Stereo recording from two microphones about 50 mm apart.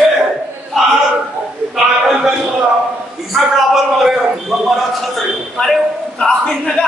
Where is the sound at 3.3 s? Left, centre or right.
Centre.